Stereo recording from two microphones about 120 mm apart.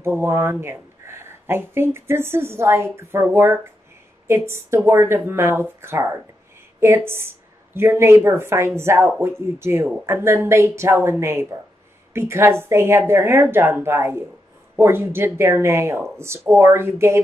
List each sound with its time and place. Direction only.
0.0 s speech: 20° right (ahead or behind)